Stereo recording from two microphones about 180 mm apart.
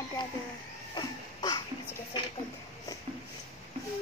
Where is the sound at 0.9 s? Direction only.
20° left (ahead or behind).